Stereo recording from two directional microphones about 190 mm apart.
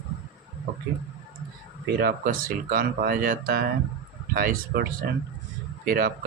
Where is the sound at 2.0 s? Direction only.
50° right (ahead or behind).